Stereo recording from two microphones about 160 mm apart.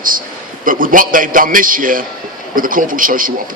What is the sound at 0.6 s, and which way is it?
A man's voice, 60° right (ahead or behind).